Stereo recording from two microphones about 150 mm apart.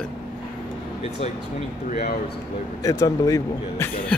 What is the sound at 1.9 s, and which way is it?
Speech, 55° left (ahead or behind).